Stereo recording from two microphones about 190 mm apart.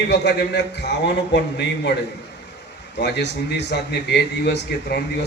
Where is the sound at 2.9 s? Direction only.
65° left (ahead or behind).